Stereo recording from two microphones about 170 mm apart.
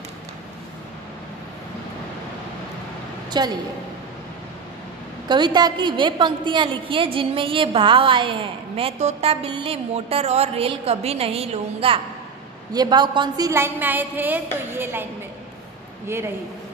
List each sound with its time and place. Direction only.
3.3 s a woman's voice: 25° right (ahead or behind)
5.3 s a woman's voice: 25° right (ahead or behind)